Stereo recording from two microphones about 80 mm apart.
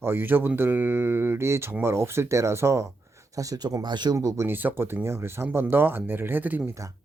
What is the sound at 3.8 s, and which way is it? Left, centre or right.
Speech, right.